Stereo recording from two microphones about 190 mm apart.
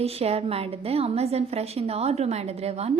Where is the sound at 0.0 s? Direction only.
30° right (ahead or behind).